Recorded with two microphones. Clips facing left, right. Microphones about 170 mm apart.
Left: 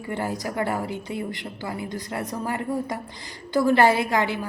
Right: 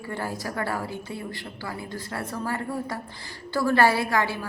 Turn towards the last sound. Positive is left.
turn(degrees=20)  # may be behind; listen again after turning